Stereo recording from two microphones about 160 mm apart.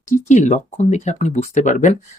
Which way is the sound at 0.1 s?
45° left (ahead or behind).